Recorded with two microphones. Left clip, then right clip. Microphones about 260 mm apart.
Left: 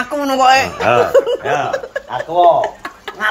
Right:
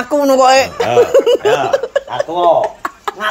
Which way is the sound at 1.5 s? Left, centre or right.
Right.